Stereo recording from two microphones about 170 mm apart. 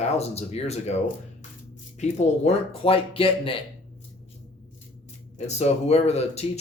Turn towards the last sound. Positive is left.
turn(degrees=40)  # may be behind; listen again after turning